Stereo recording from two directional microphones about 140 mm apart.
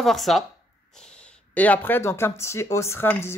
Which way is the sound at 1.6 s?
10° left (ahead or behind).